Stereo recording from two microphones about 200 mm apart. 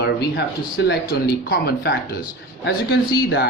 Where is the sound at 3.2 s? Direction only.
55° left (ahead or behind).